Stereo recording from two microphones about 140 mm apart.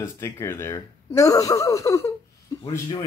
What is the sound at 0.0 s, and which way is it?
Speech, 20° left (ahead or behind).